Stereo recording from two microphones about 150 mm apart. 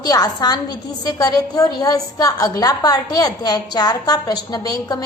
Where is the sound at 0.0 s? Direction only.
25° left (ahead or behind).